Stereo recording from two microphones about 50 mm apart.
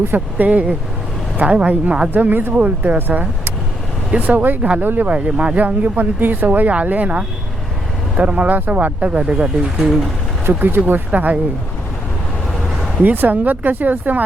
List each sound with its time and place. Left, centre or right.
0.0 s speech: right
0.4 s speech: right
2.1 s speech: right
2.6 s speech: right
9.7 s speech: centre
10.5 s speech: right
11.1 s speech: right
13.0 s speech: right